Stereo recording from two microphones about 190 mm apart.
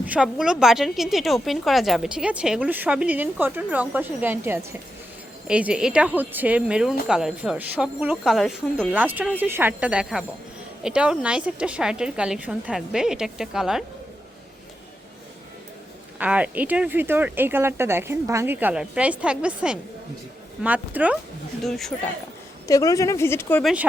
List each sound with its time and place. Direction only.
0.0 s a woman's voice: 5° right (ahead or behind)
16.1 s a woman's voice: 5° right (ahead or behind)
22.6 s speech: 15° left (ahead or behind)